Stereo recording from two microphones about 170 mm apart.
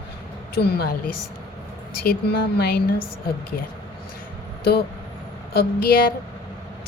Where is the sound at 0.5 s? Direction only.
70° left (ahead or behind).